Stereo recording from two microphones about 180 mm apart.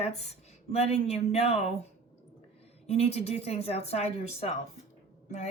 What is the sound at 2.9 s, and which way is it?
Speech, 35° left (ahead or behind).